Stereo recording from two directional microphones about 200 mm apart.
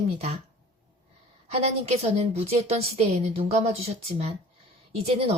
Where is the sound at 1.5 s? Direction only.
30° right (ahead or behind).